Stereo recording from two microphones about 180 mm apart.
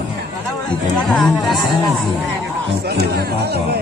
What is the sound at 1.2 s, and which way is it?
Speech, centre (ahead or behind).